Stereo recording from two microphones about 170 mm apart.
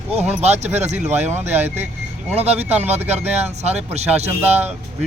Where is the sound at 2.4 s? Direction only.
40° right (ahead or behind).